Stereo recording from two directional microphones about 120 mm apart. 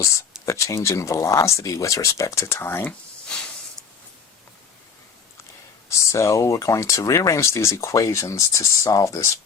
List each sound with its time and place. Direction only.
0.0 s speech: 25° left (ahead or behind)
3.2 s a sound: 5° left (ahead or behind)
5.9 s speech: 25° left (ahead or behind)